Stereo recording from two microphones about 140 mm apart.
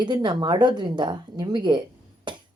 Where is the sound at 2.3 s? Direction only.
35° right (ahead or behind).